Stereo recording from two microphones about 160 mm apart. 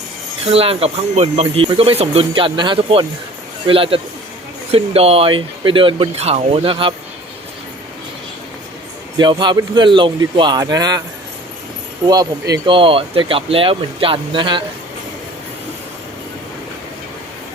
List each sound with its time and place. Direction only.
0.4 s speech: 35° right (ahead or behind)
9.1 s a man's voice: 30° right (ahead or behind)
12.0 s speech: 25° right (ahead or behind)